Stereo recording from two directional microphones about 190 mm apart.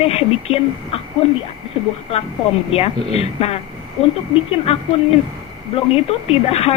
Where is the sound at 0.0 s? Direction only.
30° left (ahead or behind).